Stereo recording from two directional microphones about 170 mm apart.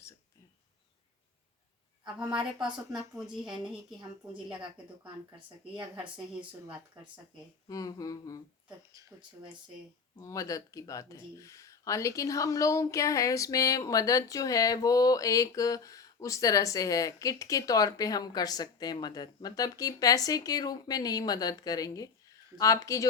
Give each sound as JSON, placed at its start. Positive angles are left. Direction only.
{"t": 2.1, "sound": "a woman's voice", "side_deg": -5}
{"t": 4.4, "sound": "speech", "side_deg": -30}
{"t": 7.7, "sound": "speech", "side_deg": 20}
{"t": 8.9, "sound": "speech", "side_deg": -20}
{"t": 10.2, "sound": "speech", "side_deg": 20}